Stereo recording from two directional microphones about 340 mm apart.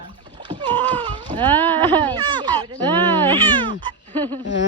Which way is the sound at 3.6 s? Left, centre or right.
Centre.